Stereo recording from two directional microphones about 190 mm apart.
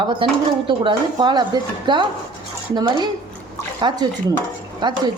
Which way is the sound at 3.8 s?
20° right (ahead or behind).